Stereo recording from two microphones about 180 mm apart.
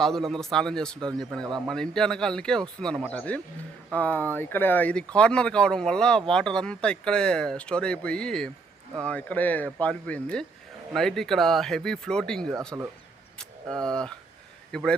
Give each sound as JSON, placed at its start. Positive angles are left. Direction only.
{"t": 0.0, "sound": "speech", "side_deg": 0}
{"t": 12.5, "sound": "speech", "side_deg": -15}
{"t": 13.4, "sound": "a man's voice", "side_deg": 5}